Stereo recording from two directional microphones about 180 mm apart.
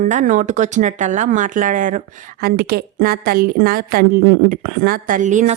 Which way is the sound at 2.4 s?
60° right (ahead or behind).